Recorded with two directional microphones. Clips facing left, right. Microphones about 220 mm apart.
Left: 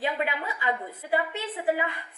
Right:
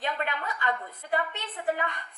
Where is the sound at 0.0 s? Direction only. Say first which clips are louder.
Left 3 dB; 5° left (ahead or behind).